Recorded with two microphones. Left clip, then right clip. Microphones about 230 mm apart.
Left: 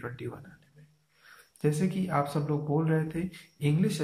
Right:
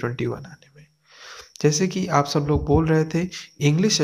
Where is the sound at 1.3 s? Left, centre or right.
Right.